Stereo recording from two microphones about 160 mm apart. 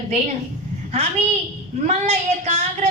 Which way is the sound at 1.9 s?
45° right (ahead or behind).